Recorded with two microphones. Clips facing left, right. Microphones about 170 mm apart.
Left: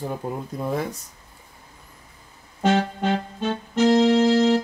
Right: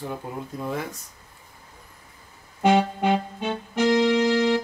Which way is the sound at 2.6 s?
15° right (ahead or behind).